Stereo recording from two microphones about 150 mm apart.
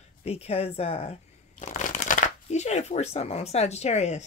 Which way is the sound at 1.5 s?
55° left (ahead or behind).